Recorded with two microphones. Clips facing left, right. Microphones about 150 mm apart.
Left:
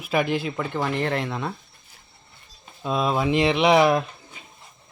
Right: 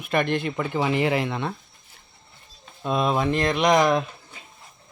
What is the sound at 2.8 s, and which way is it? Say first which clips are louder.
Speech: even; centre (ahead or behind).